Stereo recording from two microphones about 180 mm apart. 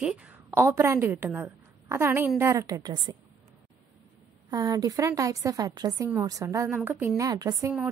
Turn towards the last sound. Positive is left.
turn(degrees=-15)  # may be behind; listen again after turning